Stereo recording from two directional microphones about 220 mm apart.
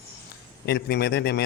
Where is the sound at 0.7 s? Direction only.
45° left (ahead or behind).